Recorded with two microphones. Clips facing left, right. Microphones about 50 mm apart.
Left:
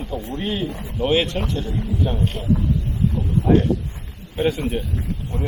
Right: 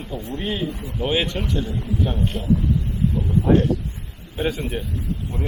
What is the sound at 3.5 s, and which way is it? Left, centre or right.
Speech, centre.